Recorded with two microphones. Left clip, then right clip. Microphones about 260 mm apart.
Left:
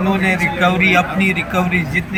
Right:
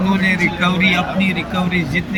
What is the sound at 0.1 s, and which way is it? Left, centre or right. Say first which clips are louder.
A man's voice: even; centre.